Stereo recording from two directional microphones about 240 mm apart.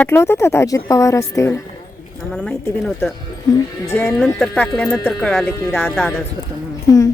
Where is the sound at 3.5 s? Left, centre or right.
Centre.